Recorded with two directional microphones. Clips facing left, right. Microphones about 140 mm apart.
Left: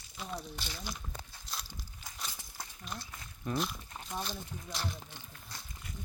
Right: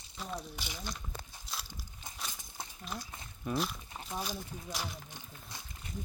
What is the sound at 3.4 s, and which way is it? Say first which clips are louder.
Speech: even; centre (ahead or behind).